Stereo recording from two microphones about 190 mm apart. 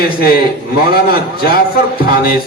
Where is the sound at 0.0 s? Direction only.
55° left (ahead or behind).